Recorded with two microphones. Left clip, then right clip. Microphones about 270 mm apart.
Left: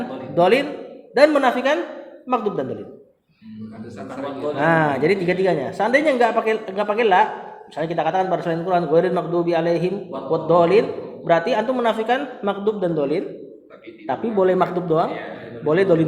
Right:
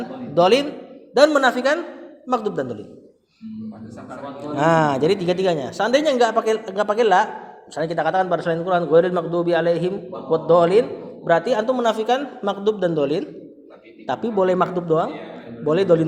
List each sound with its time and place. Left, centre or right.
0.3 s speech: right
4.5 s speech: right